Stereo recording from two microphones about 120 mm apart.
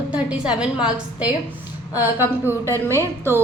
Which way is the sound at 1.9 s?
20° right (ahead or behind).